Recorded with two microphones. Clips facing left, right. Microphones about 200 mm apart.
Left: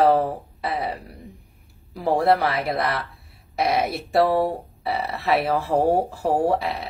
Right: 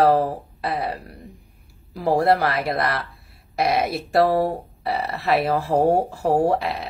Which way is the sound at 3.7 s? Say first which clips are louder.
Right 1 dB; centre (ahead or behind).